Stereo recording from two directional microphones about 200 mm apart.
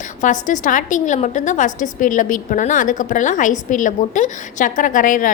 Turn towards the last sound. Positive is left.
turn(degrees=40)  # may be behind; listen again after turning